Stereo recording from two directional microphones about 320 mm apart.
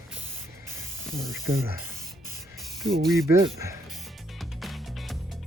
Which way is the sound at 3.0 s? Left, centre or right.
Centre.